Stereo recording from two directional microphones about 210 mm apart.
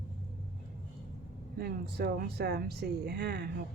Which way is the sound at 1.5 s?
50° right (ahead or behind).